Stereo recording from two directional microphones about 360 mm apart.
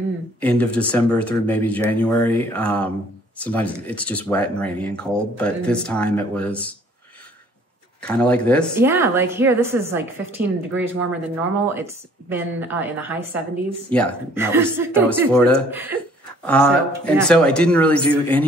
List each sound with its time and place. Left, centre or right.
0.4 s speech: centre
8.0 s a woman's voice: centre